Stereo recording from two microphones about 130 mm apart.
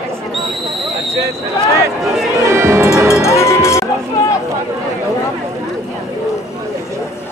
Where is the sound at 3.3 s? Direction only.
20° left (ahead or behind).